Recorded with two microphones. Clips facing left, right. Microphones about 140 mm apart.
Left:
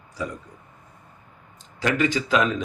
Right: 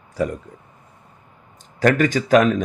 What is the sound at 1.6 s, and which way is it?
Speech, 50° right (ahead or behind).